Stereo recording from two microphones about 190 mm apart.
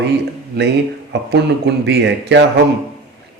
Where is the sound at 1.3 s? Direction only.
65° right (ahead or behind).